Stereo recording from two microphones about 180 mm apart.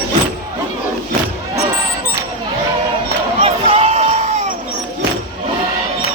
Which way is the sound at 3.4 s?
40° right (ahead or behind).